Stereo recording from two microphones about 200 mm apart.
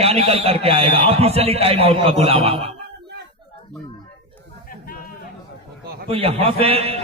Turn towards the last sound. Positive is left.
turn(degrees=-30)  # may be behind; listen again after turning